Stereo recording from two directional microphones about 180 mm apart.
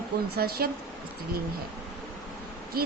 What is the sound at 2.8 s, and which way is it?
Speech, 55° right (ahead or behind).